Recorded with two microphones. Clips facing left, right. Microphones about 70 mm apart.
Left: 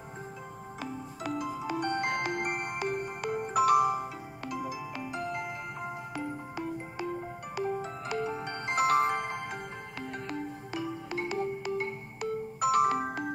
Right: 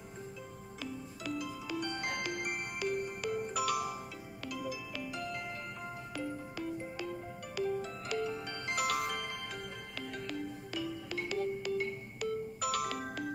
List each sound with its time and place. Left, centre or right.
1.2 s music: left